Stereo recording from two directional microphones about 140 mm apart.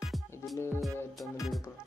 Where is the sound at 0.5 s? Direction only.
20° left (ahead or behind).